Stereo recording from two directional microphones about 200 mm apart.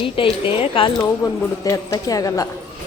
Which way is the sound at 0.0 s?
25° left (ahead or behind).